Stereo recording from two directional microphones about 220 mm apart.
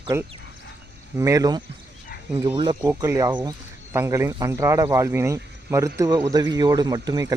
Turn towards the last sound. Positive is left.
turn(degrees=-15)  # may be behind; listen again after turning